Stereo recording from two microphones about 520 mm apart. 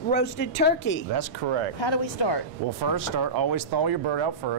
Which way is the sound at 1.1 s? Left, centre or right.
Right.